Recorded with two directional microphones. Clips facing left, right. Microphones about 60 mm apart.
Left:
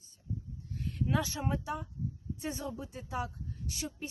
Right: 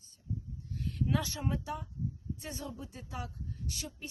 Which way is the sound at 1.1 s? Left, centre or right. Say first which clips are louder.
Left 2 dB; centre.